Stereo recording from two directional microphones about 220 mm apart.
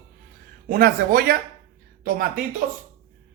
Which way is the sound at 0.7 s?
40° right (ahead or behind).